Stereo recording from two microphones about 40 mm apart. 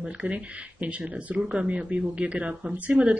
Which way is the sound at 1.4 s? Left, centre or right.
Right.